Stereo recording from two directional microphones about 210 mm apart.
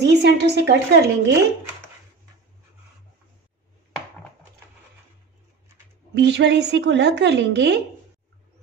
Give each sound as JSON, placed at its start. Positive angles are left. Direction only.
{"t": 0.0, "sound": "a woman's voice", "side_deg": -50}
{"t": 6.1, "sound": "a woman's voice", "side_deg": -55}